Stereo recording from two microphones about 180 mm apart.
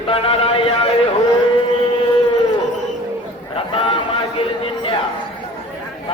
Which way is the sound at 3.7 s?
30° left (ahead or behind).